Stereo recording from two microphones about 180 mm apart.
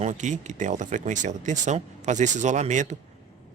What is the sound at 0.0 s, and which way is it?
A man's voice, 45° right (ahead or behind).